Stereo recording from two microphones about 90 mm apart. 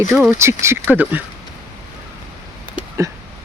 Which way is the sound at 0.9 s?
20° right (ahead or behind).